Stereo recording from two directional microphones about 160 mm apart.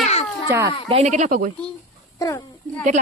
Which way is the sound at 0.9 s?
45° right (ahead or behind).